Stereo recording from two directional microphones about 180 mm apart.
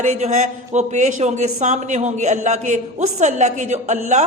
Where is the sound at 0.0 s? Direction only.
40° right (ahead or behind).